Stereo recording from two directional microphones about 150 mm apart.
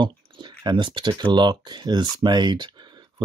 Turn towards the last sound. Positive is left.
turn(degrees=-30)  # may be behind; listen again after turning